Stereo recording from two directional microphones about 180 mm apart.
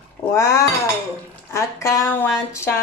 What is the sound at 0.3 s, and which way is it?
Speech, 20° left (ahead or behind).